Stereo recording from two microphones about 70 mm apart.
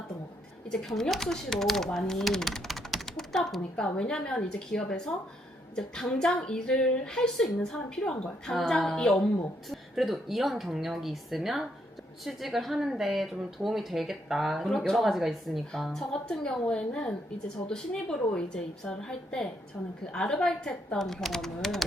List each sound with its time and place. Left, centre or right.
0.7 s a woman's voice: centre